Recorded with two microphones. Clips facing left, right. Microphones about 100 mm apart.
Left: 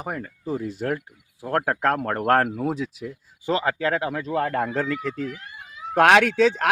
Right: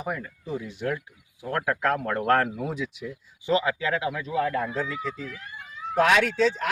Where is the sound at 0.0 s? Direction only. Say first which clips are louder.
Left 1 dB; 40° left (ahead or behind).